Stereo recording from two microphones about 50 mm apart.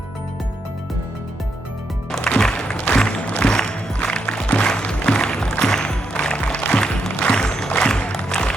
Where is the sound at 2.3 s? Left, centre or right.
Centre.